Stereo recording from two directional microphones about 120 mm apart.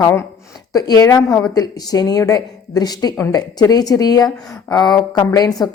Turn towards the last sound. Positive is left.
turn(degrees=35)  # may be behind; listen again after turning